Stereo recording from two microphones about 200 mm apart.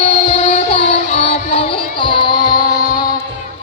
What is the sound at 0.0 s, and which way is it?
Music, 30° left (ahead or behind).